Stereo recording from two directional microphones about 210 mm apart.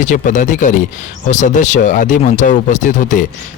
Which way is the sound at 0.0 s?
35° left (ahead or behind).